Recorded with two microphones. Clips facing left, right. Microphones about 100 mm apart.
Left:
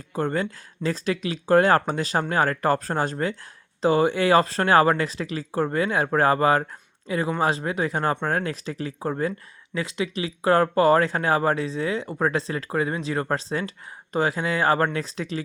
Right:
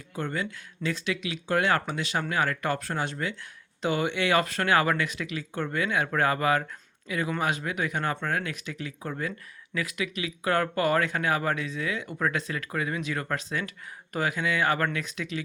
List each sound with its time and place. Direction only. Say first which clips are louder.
0.1 s speech: left 6 dB; 40° left (ahead or behind)